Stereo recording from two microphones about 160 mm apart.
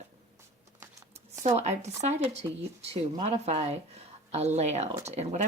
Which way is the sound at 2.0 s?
45° right (ahead or behind).